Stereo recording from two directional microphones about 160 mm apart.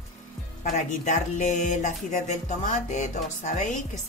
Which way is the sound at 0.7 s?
50° left (ahead or behind).